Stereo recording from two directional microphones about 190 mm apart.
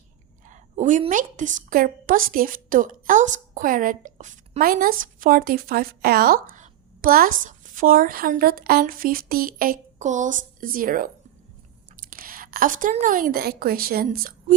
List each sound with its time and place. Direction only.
0.4 s a woman's voice: 40° right (ahead or behind)
12.1 s a woman's voice: 50° right (ahead or behind)